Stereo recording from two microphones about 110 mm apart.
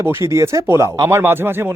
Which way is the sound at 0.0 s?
25° right (ahead or behind).